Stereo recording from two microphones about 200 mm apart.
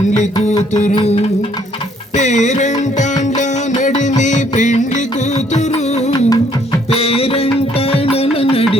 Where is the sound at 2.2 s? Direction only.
35° left (ahead or behind).